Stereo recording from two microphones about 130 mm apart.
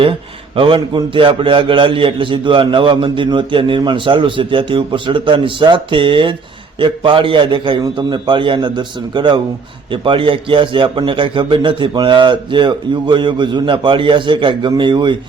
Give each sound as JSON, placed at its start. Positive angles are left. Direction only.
{"t": 0.0, "sound": "a man's voice", "side_deg": -45}